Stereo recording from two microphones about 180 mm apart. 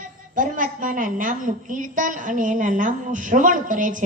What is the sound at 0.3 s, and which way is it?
A woman's voice, 50° right (ahead or behind).